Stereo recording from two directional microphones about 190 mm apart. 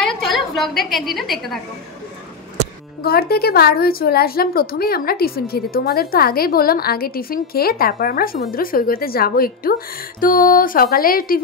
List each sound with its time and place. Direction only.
0.0 s a woman's voice: centre (ahead or behind)
3.0 s a woman's voice: 55° left (ahead or behind)